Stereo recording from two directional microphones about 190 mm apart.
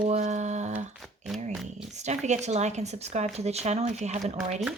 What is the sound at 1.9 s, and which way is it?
Speech, 35° right (ahead or behind).